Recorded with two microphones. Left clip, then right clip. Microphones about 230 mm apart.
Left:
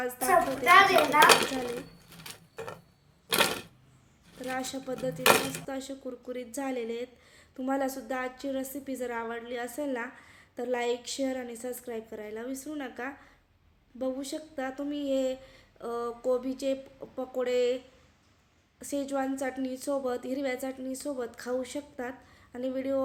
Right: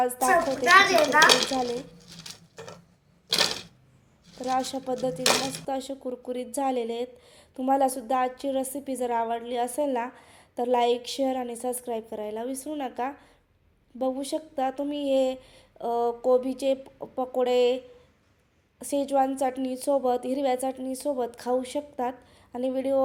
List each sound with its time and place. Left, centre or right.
0.0 s speech: centre
1.2 s dishes: centre
4.5 s speech: centre
18.8 s speech: centre